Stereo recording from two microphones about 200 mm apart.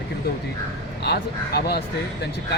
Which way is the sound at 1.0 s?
55° left (ahead or behind).